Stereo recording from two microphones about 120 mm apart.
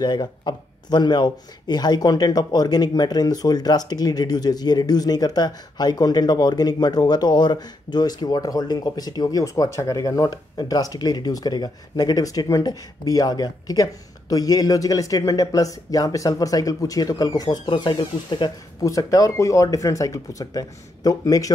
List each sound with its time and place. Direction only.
0.0 s speech: 35° left (ahead or behind)
18.9 s speech: 30° left (ahead or behind)